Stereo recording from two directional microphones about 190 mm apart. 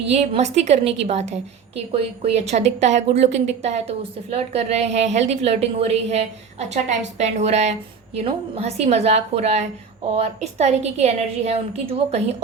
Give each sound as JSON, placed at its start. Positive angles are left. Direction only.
{"t": 0.1, "sound": "a woman's voice", "side_deg": -35}